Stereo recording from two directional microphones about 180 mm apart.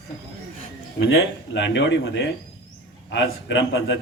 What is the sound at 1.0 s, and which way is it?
Speech, 90° left.